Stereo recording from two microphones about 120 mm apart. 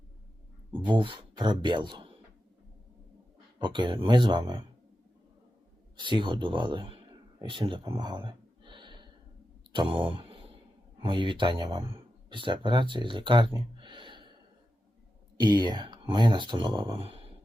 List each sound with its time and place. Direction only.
0.9 s speech: 45° right (ahead or behind)
3.6 s speech: 40° right (ahead or behind)
6.0 s speech: 40° right (ahead or behind)
7.4 s a sound: 45° right (ahead or behind)
9.7 s speech: 45° right (ahead or behind)
13.6 s a sound: 40° right (ahead or behind)
15.4 s speech: 40° right (ahead or behind)